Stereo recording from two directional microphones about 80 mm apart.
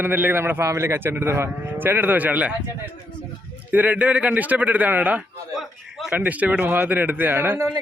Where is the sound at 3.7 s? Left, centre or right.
Centre.